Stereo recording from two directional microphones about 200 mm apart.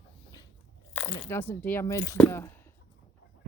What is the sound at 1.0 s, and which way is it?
Speech, 15° left (ahead or behind).